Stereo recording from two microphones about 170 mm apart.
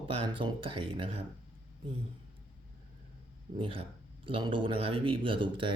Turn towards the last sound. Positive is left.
turn(degrees=-30)  # may be behind; listen again after turning